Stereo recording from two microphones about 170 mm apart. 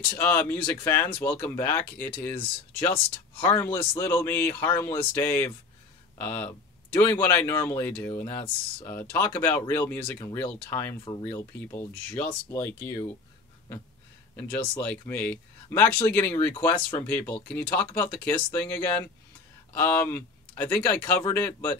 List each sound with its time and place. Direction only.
0.2 s speech: 10° left (ahead or behind)
14.3 s speech: 10° left (ahead or behind)